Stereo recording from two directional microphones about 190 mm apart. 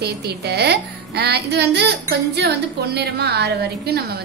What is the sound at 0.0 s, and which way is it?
A child's voice, 60° right (ahead or behind).